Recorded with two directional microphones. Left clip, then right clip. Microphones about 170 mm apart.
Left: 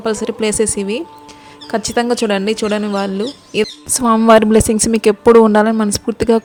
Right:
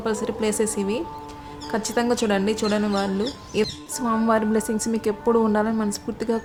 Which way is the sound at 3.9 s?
50° left (ahead or behind).